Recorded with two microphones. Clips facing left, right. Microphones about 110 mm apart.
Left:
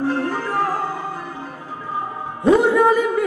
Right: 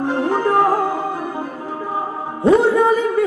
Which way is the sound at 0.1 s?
20° right (ahead or behind).